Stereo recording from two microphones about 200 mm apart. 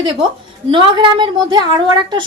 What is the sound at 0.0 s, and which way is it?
A woman's voice, 25° right (ahead or behind).